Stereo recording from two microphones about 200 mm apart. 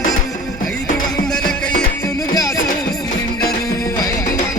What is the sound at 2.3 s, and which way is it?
Music, 20° left (ahead or behind).